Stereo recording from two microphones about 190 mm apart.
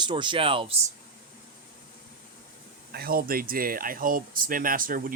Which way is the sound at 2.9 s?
50° right (ahead or behind).